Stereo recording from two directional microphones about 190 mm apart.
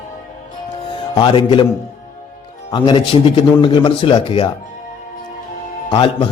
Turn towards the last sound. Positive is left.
turn(degrees=30)  # may be behind; listen again after turning